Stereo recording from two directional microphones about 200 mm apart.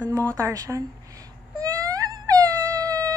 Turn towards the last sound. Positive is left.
turn(degrees=-15)  # may be behind; listen again after turning